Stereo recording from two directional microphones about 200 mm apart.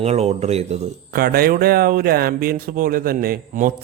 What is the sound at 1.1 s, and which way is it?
A man's voice, 50° right (ahead or behind).